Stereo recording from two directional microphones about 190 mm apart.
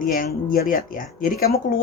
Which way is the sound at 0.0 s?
45° left (ahead or behind).